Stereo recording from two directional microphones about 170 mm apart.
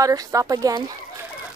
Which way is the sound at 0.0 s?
20° right (ahead or behind).